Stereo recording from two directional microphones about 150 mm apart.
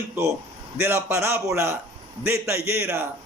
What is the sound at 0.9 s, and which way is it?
A man's voice, 15° right (ahead or behind).